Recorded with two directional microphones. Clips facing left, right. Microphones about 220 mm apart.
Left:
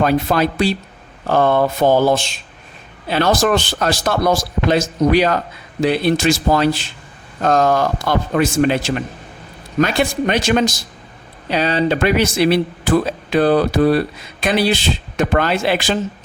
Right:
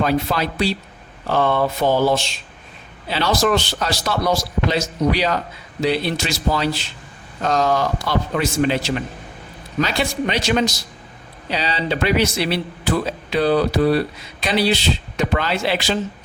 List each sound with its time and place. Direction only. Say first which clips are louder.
0.0 s speech: left 4 dB; 50° left (ahead or behind)